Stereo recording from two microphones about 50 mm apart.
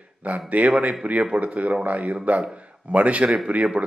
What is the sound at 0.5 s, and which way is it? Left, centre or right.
A man's voice, right.